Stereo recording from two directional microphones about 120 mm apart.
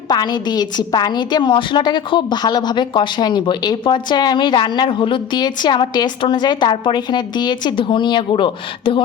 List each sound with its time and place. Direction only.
0.1 s a woman's voice: 35° left (ahead or behind)